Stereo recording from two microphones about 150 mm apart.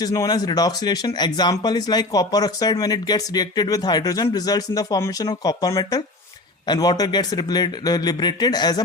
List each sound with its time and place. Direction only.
0.0 s speech: 25° left (ahead or behind)